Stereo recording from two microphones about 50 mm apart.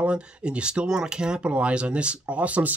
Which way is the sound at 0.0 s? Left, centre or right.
Right.